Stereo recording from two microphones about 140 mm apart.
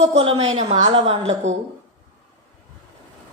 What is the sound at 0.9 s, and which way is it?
Speech, 45° right (ahead or behind).